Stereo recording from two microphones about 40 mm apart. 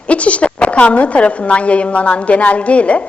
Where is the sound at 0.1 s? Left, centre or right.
Left.